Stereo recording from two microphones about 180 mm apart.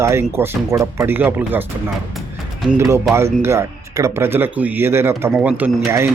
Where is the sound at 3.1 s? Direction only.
15° right (ahead or behind).